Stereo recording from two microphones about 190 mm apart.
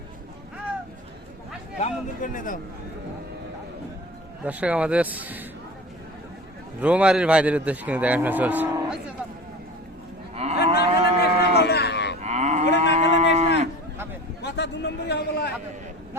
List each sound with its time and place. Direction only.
1.8 s a man's voice: 45° left (ahead or behind)
4.4 s a man's voice: 5° right (ahead or behind)
6.8 s a man's voice: 5° right (ahead or behind)
10.3 s moo: 35° right (ahead or behind)
10.8 s a sound: 60° left (ahead or behind)
12.2 s moo: 35° right (ahead or behind)
14.4 s a sound: 65° left (ahead or behind)